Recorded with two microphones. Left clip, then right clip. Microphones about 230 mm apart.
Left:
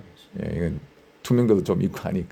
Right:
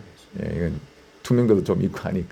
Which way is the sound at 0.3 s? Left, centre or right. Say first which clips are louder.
Right 1 dB; centre.